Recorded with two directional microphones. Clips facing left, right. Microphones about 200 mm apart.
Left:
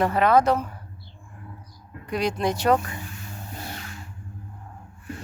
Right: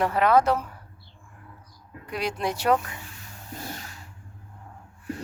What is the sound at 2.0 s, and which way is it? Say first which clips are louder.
Speech: left 4 dB; 5° right (ahead or behind).